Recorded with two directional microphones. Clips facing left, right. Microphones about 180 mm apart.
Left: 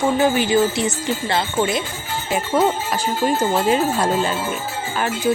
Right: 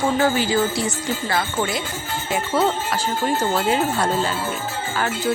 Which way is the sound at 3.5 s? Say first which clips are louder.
Left 2 dB; 20° left (ahead or behind).